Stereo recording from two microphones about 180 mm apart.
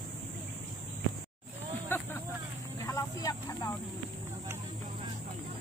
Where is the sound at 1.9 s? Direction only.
10° left (ahead or behind).